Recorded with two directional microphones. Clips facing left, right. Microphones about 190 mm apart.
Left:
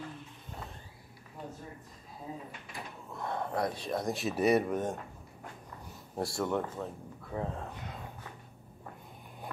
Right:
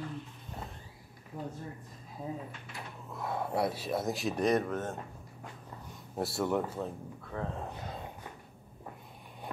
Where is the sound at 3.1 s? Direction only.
5° right (ahead or behind); by 4.9 s 15° left (ahead or behind).